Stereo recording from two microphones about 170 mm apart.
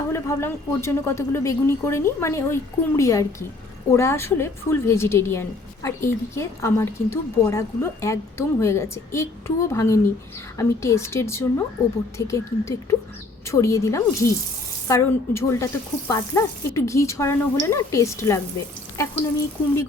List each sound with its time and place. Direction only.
0.1 s a woman's voice: 15° left (ahead or behind)